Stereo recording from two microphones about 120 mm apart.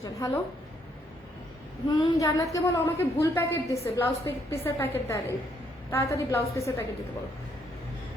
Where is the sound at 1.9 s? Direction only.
30° left (ahead or behind).